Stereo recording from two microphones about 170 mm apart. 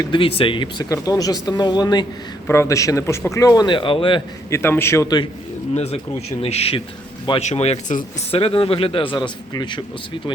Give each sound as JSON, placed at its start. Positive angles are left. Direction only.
{"t": 0.0, "sound": "speech", "side_deg": 30}
{"t": 4.4, "sound": "a man's voice", "side_deg": 15}
{"t": 5.7, "sound": "speech", "side_deg": 40}